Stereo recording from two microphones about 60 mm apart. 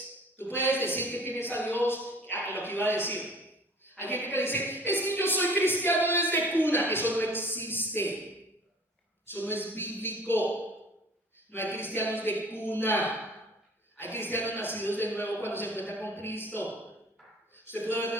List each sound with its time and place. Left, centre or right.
0.3 s a woman's voice: left
9.2 s a woman's voice: left
11.5 s a woman's voice: left
17.7 s a woman's voice: left